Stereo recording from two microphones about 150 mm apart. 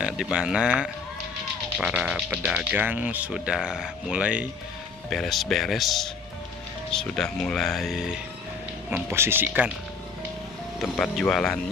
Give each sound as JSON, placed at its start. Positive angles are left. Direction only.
{"t": 0.0, "sound": "speech", "side_deg": -5}
{"t": 9.1, "sound": "speech", "side_deg": -15}
{"t": 10.8, "sound": "speech", "side_deg": 0}